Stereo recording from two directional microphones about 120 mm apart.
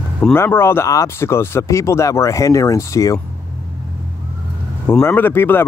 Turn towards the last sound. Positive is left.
turn(degrees=20)  # may be behind; listen again after turning